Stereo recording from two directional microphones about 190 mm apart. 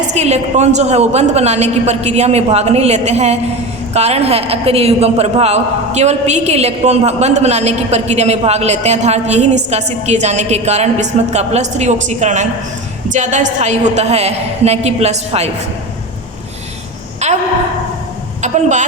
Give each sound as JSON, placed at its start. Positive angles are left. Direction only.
{"t": 0.1, "sound": "a man's voice", "side_deg": -35}
{"t": 17.2, "sound": "a sound", "side_deg": -35}
{"t": 18.4, "sound": "a man's voice", "side_deg": -40}